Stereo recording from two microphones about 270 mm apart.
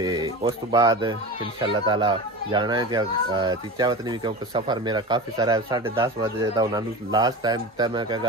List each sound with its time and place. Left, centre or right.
0.0 s speech: centre